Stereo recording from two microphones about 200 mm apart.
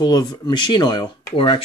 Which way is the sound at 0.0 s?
20° left (ahead or behind).